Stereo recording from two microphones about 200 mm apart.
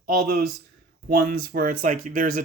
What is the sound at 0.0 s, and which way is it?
Speech, 50° right (ahead or behind).